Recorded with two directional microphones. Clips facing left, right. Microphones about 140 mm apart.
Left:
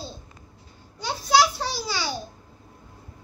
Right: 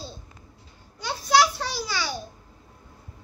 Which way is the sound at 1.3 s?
30° left (ahead or behind).